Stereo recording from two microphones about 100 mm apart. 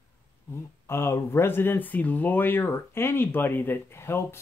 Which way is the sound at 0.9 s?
25° left (ahead or behind).